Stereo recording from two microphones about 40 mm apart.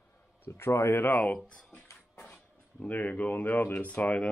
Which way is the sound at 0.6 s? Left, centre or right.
Left.